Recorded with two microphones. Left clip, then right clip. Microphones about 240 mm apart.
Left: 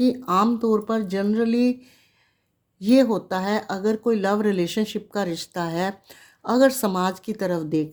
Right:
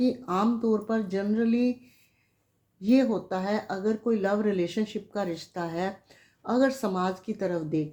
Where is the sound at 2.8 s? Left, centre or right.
Left.